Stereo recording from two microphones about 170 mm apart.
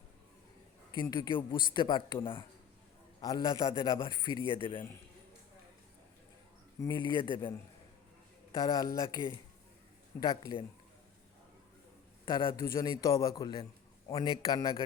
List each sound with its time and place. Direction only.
0.9 s speech: 25° left (ahead or behind)
6.8 s speech: 30° left (ahead or behind)
8.8 s speech: 20° left (ahead or behind)
10.2 s speech: 30° left (ahead or behind)
12.2 s speech: 30° left (ahead or behind)